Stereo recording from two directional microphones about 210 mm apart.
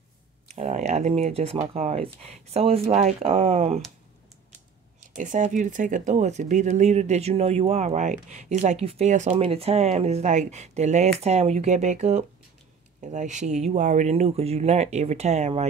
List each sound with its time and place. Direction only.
0.6 s speech: 30° right (ahead or behind)
5.0 s speech: 35° right (ahead or behind)